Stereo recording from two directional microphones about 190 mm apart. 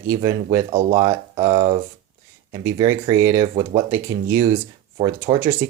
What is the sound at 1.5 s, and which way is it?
Speech, 30° right (ahead or behind).